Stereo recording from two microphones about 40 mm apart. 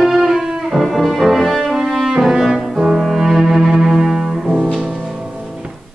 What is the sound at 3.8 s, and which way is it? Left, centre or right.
Bowed string instrument, centre.